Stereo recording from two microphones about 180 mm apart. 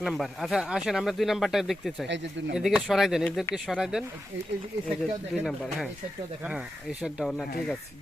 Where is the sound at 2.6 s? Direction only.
Centre (ahead or behind).